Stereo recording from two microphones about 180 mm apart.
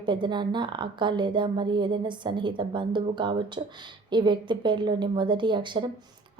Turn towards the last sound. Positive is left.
turn(degrees=-25)  # may be behind; listen again after turning